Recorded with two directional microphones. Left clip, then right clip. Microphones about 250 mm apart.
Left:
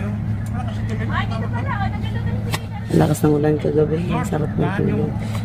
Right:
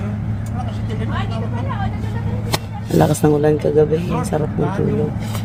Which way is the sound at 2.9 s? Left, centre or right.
Centre.